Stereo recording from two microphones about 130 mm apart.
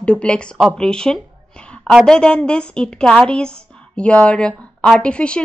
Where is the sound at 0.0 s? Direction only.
10° left (ahead or behind).